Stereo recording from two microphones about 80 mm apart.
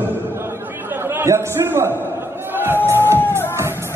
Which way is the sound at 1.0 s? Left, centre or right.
Right.